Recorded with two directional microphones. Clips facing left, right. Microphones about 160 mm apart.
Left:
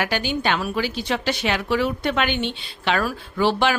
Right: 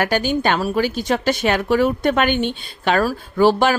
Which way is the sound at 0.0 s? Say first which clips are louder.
Right 5 dB; 45° right (ahead or behind).